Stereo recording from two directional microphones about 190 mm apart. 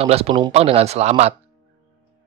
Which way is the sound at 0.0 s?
30° right (ahead or behind).